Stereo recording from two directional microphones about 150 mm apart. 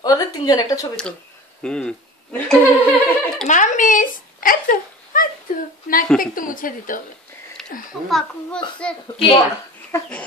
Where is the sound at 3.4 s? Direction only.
55° left (ahead or behind).